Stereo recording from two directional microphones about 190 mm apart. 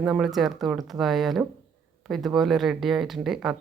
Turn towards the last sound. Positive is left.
turn(degrees=0)  # may be behind; listen again after turning